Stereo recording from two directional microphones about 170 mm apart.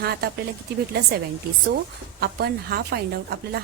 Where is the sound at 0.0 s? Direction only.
65° right (ahead or behind).